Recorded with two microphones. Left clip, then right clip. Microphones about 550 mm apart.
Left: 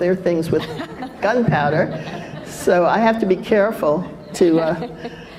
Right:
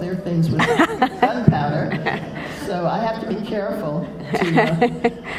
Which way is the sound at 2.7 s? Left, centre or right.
Left.